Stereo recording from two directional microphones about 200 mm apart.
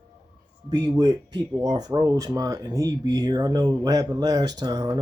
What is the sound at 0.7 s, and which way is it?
Speech, 20° right (ahead or behind).